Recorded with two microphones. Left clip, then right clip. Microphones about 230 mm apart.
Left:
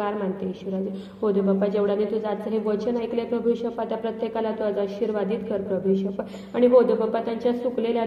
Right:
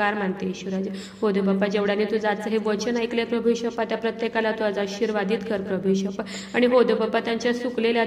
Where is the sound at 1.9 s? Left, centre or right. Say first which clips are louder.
Right 2 dB; right.